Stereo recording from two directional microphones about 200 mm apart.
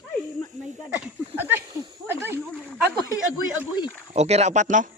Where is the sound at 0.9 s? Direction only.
10° right (ahead or behind).